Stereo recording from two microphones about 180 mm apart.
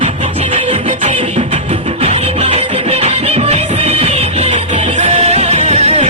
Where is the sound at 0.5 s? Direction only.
35° right (ahead or behind).